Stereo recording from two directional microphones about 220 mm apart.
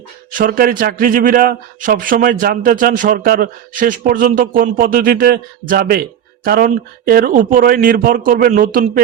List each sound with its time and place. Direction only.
0.3 s speech: 40° right (ahead or behind)